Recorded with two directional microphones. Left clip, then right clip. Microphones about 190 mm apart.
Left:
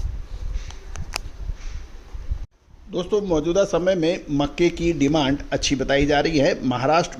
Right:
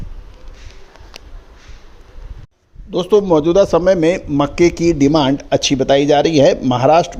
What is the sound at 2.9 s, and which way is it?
A man's voice, 35° right (ahead or behind).